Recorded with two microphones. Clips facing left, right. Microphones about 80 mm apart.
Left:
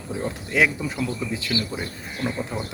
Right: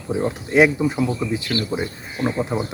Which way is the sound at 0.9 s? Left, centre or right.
Centre.